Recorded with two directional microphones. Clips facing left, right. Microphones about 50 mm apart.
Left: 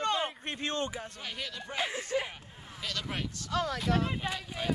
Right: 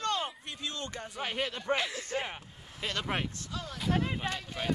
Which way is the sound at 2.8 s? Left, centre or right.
Right.